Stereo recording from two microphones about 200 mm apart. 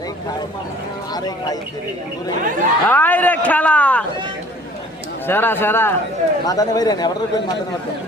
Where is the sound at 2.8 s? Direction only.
10° left (ahead or behind).